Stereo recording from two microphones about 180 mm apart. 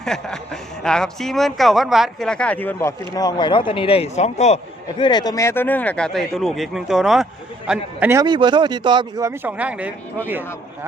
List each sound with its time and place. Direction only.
0.0 s speech: 5° left (ahead or behind)
3.2 s speech: 20° left (ahead or behind); by 4.6 s 40° left (ahead or behind)
4.9 s a man's voice: 25° left (ahead or behind); by 8.2 s 10° right (ahead or behind)
8.2 s speech: 25° right (ahead or behind); by 9.9 s 10° right (ahead or behind)